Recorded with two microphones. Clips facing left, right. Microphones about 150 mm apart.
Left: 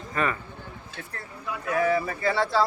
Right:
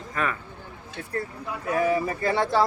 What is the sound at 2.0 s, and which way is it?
Speech, 40° right (ahead or behind).